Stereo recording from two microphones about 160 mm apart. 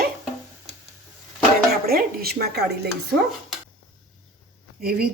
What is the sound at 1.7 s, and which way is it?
A woman's voice, 70° right (ahead or behind).